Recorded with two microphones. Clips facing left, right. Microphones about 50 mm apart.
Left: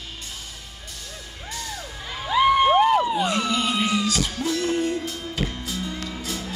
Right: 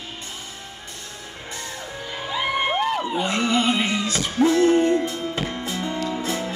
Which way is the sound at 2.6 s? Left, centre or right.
Centre.